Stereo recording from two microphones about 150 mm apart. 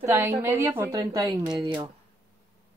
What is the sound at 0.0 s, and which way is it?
A woman's voice, 15° right (ahead or behind).